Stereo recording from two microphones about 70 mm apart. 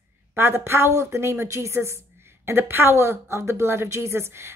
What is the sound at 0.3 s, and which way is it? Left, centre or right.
Speech, right.